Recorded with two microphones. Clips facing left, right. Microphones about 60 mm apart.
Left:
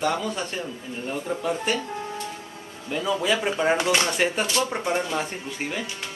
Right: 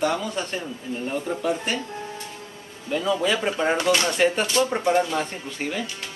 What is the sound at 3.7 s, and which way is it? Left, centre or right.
Speech, left.